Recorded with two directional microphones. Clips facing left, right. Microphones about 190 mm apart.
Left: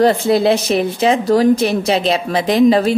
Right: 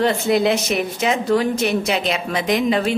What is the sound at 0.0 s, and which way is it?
A woman's voice, 35° left (ahead or behind).